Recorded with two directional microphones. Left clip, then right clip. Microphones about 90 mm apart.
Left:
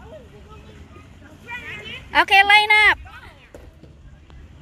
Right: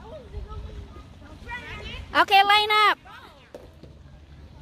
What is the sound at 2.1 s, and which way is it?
Speech, 45° right (ahead or behind).